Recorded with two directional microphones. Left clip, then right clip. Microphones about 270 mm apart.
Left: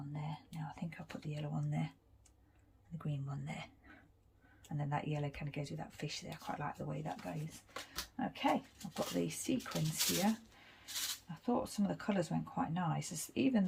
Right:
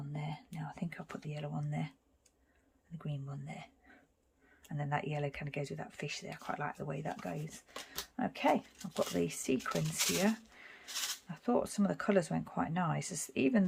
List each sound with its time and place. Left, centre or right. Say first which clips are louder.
0.1 s whispering: right 5 dB; right; by 1.9 s centre
3.0 s speech: even; centre